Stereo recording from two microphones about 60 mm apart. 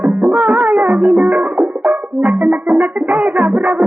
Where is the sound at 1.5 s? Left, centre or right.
Centre.